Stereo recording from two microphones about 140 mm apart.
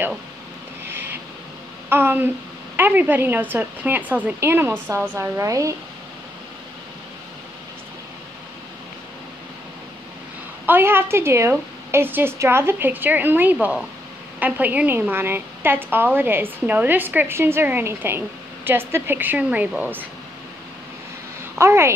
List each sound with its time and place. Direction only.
1.9 s a woman's voice: 15° right (ahead or behind)
10.7 s a woman's voice: 15° right (ahead or behind)
21.5 s a woman's voice: 20° right (ahead or behind)